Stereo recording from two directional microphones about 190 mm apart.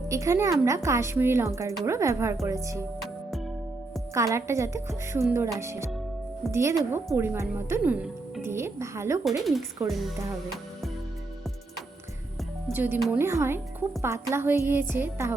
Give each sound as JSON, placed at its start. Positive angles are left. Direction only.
{"t": 0.1, "sound": "a woman's voice", "side_deg": -15}
{"t": 4.1, "sound": "a woman's voice", "side_deg": -15}
{"t": 9.2, "sound": "a woman's voice", "side_deg": 0}
{"t": 12.7, "sound": "a woman's voice", "side_deg": -10}